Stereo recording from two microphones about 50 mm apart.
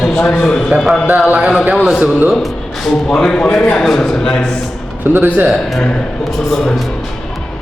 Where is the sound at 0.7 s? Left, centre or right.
Centre.